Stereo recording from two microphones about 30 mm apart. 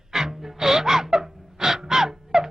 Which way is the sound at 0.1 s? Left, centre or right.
Centre.